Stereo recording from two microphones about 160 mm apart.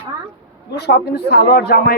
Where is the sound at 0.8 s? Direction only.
90° left.